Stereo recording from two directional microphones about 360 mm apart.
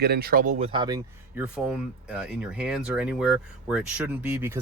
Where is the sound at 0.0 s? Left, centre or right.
Right.